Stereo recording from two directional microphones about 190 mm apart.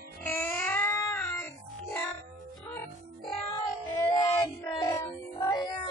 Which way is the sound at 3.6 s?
20° left (ahead or behind).